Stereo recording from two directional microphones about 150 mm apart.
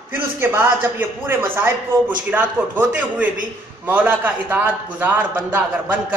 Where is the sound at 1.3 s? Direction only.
15° right (ahead or behind).